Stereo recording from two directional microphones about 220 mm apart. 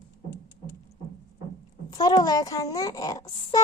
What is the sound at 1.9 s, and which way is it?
Female singing, 15° left (ahead or behind).